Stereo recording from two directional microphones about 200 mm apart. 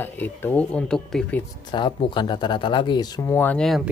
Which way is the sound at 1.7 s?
25° left (ahead or behind).